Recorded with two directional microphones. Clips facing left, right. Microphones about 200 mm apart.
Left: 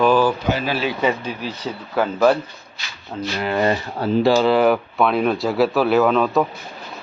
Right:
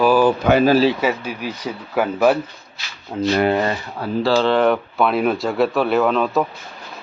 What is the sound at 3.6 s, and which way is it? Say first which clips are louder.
Speech: left 3 dB; 30° left (ahead or behind).